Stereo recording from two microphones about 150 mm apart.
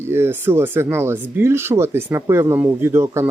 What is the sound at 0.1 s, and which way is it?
Speech, 15° right (ahead or behind).